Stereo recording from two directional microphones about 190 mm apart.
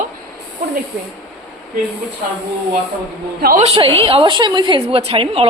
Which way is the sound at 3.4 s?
50° right (ahead or behind).